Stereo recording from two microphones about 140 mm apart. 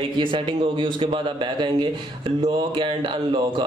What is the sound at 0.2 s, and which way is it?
A man's voice, 35° right (ahead or behind).